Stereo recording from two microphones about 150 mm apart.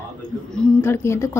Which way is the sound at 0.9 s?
15° left (ahead or behind).